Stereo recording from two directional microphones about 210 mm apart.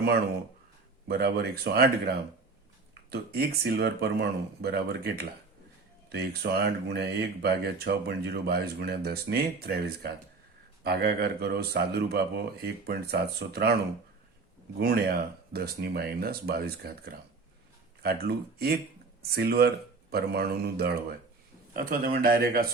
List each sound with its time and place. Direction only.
1.0 s speech: 50° right (ahead or behind)
3.1 s speech: 50° right (ahead or behind)
14.8 s speech: 50° right (ahead or behind)